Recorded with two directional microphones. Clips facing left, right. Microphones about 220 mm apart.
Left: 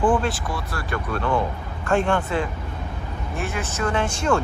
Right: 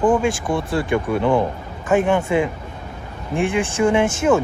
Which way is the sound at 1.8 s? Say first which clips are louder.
Right 4 dB; 5° right (ahead or behind).